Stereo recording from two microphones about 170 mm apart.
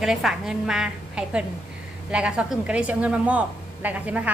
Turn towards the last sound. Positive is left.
turn(degrees=-10)  # may be behind; listen again after turning